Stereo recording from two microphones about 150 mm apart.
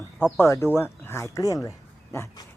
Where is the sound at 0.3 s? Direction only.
20° left (ahead or behind).